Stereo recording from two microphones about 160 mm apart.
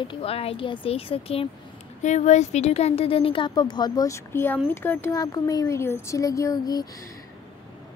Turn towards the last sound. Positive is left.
turn(degrees=25)  # may be behind; listen again after turning